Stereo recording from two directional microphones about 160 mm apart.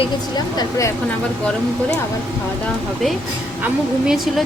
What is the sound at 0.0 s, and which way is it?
Speech, 25° left (ahead or behind).